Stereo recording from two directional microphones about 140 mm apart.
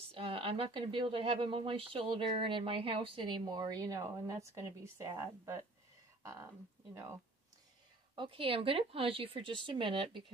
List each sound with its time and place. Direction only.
0.1 s a woman's voice: 40° right (ahead or behind); by 7.2 s 20° right (ahead or behind)
8.2 s a woman's voice: 40° right (ahead or behind)